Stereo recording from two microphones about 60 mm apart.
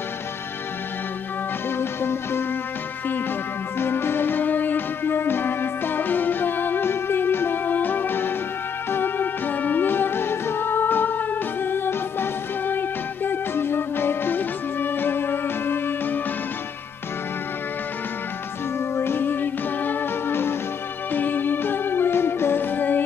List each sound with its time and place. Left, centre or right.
1.8 s music: left
3.8 s music: left
18.9 s music: left